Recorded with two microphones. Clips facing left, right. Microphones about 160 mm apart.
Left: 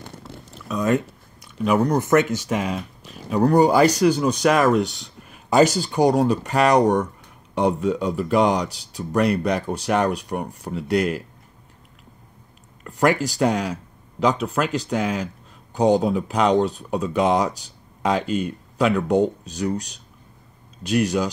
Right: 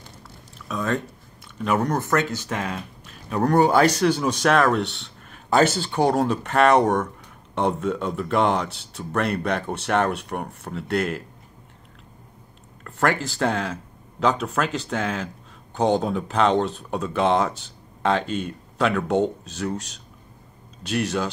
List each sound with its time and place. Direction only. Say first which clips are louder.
1.6 s speech: left 3 dB; 5° left (ahead or behind)
1.9 s speech: left 5 dB; 20° left (ahead or behind)
2.5 s speech: left 4 dB; centre (ahead or behind)
12.8 s speech: left 4 dB; 10° left (ahead or behind)
20.8 s speech: left 5 dB; 5° left (ahead or behind)